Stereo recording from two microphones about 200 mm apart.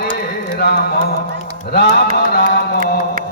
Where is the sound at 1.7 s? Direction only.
55° left (ahead or behind).